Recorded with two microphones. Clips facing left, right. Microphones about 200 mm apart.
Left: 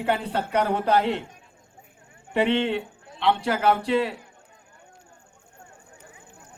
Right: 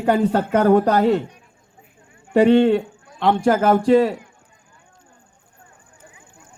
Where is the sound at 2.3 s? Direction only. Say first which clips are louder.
Right 9 dB; 40° right (ahead or behind).